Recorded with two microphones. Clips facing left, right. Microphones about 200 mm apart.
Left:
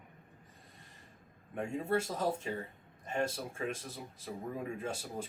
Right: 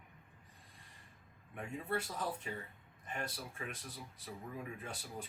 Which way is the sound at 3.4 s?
40° left (ahead or behind).